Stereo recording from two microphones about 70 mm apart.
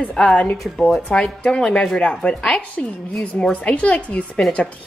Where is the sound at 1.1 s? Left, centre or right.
Centre.